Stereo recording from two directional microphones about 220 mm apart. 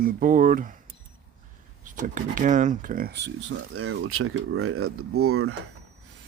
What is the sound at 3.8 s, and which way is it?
Speech, 80° right.